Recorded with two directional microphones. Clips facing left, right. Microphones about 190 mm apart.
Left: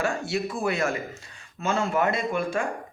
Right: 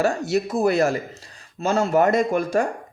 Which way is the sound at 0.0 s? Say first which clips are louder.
Right 6 dB; 40° right (ahead or behind).